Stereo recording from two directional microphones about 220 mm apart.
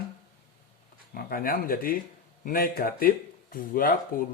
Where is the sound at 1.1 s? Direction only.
40° left (ahead or behind).